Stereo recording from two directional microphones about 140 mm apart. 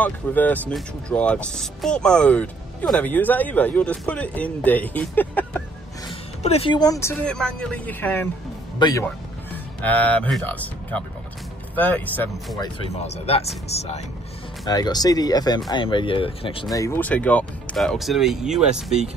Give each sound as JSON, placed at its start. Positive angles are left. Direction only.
{"t": 0.0, "sound": "speech", "side_deg": 10}
{"t": 6.4, "sound": "speech", "side_deg": 45}
{"t": 6.7, "sound": "speech", "side_deg": 25}
{"t": 7.2, "sound": "speech", "side_deg": 5}
{"t": 8.7, "sound": "a man's voice", "side_deg": 30}
{"t": 9.0, "sound": "speech", "side_deg": 10}
{"t": 12.9, "sound": "speech", "side_deg": 50}
{"t": 14.7, "sound": "speech", "side_deg": 30}
{"t": 16.7, "sound": "speech", "side_deg": 20}
{"t": 17.0, "sound": "speech", "side_deg": 10}